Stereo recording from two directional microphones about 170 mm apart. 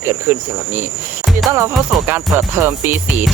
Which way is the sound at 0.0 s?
15° right (ahead or behind).